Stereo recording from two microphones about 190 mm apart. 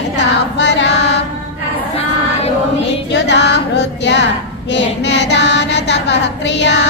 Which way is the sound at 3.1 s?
65° left (ahead or behind).